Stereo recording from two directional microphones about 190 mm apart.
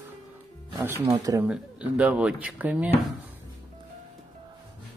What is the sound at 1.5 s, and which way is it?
Speech, 5° right (ahead or behind).